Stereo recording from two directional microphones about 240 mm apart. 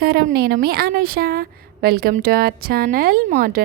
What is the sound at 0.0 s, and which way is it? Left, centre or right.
A woman's voice, right.